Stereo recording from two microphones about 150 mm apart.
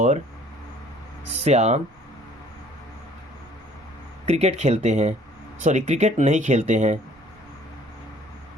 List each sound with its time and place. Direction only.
1.5 s speech: 45° right (ahead or behind)
4.3 s speech: 45° right (ahead or behind)